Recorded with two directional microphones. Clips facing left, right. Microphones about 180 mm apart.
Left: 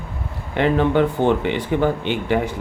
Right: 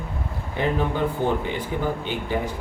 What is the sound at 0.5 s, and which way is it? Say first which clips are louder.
Speech: left 7 dB; 75° left (ahead or behind).